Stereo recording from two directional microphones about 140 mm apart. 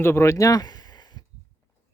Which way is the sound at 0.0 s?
20° left (ahead or behind).